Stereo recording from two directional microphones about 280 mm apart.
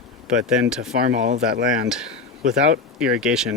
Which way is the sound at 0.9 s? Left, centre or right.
Right.